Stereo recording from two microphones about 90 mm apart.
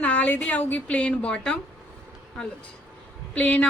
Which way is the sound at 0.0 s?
15° left (ahead or behind).